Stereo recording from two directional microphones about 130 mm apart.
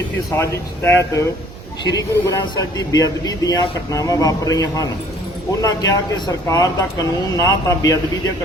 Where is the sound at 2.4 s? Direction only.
30° left (ahead or behind).